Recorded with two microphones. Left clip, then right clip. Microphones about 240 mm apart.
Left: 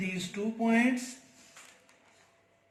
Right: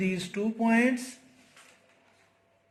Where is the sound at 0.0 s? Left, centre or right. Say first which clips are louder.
Right 4 dB; right.